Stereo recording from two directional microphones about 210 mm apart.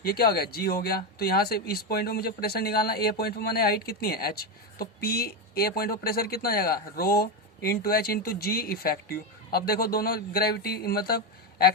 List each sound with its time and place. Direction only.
0.0 s speech: 45° left (ahead or behind)